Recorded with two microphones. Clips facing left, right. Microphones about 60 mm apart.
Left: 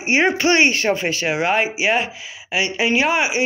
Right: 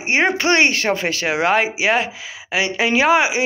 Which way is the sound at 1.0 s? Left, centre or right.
Right.